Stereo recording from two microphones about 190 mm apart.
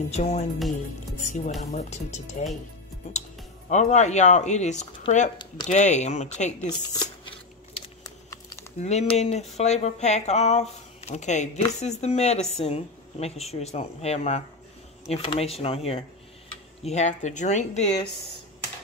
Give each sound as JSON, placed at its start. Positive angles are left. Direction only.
{"t": 0.1, "sound": "speech", "side_deg": 35}
{"t": 6.7, "sound": "speech", "side_deg": 20}
{"t": 7.8, "sound": "shuffling cards", "side_deg": 20}
{"t": 8.7, "sound": "speech", "side_deg": 35}